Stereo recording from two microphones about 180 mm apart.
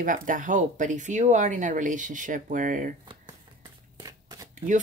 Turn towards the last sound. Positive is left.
turn(degrees=-20)  # may be behind; listen again after turning